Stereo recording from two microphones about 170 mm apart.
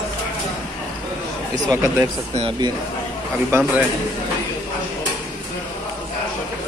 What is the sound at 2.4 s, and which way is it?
Speech, 25° right (ahead or behind).